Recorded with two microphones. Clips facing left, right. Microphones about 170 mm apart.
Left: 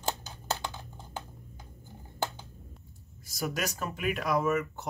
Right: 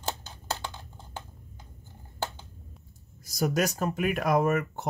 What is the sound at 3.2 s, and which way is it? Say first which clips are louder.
Speech: right 7 dB; 40° right (ahead or behind).